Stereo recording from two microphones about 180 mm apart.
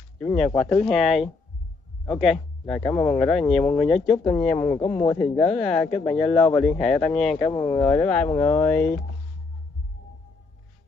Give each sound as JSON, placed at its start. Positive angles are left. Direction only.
{"t": 0.2, "sound": "speech", "side_deg": 5}
{"t": 4.6, "sound": "speech", "side_deg": 25}
{"t": 5.0, "sound": "speech", "side_deg": 10}
{"t": 7.5, "sound": "speech", "side_deg": 20}
{"t": 7.8, "sound": "speech", "side_deg": 10}